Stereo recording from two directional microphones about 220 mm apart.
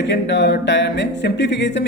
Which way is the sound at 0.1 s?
50° left (ahead or behind).